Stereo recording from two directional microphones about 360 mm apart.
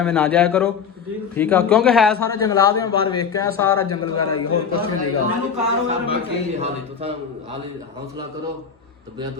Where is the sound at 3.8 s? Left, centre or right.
Left.